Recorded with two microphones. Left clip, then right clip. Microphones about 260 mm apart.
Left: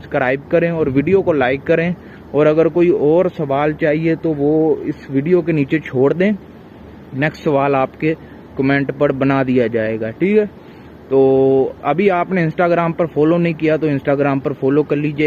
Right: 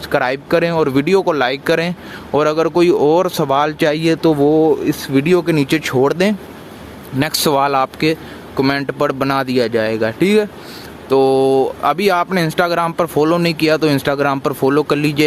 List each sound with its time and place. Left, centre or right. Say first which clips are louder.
0.1 s speech: even; centre
4.4 s speech: right 1 dB; right
5.1 s speech: right 1 dB; centre